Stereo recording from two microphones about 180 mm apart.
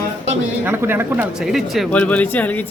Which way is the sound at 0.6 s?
10° right (ahead or behind).